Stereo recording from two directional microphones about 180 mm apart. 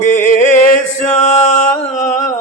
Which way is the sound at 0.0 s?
45° left (ahead or behind).